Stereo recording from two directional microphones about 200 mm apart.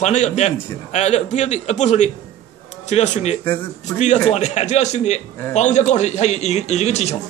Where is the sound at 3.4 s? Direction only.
10° left (ahead or behind).